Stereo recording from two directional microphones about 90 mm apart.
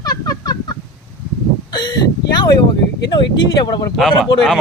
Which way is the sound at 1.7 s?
50° left (ahead or behind).